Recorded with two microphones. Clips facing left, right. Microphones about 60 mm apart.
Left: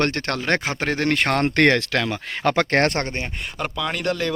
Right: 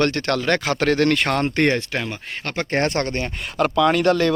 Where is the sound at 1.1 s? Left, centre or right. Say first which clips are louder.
Even; left.